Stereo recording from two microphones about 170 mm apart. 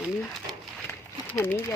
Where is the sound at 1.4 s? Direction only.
15° left (ahead or behind).